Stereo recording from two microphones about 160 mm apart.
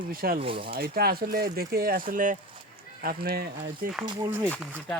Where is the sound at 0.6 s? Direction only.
75° right (ahead or behind); by 2.3 s 60° right (ahead or behind).